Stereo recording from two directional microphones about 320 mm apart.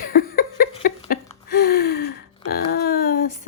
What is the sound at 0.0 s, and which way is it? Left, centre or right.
Laughter, left.